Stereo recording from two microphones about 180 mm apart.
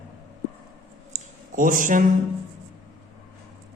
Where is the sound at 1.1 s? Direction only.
45° right (ahead or behind).